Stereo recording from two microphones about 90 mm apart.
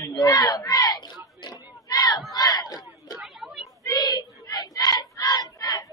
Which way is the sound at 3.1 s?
Centre (ahead or behind).